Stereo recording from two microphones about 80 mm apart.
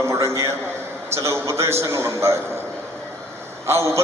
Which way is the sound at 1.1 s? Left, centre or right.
Right.